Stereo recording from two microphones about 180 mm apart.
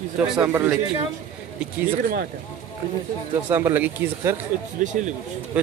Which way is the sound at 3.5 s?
15° right (ahead or behind).